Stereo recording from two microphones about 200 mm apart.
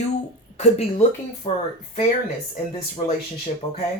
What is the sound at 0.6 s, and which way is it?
Speech, 35° left (ahead or behind).